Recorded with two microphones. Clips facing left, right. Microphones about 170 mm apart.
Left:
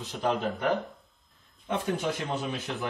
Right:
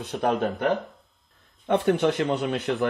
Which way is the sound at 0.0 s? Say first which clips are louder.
Right 4 dB; 65° right (ahead or behind).